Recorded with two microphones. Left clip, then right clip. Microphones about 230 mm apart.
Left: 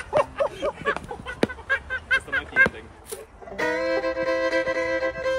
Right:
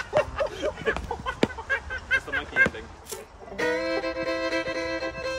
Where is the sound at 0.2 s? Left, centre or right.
Centre.